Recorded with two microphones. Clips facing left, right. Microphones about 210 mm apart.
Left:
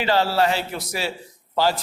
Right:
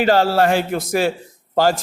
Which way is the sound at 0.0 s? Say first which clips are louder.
Right 5 dB; 45° right (ahead or behind).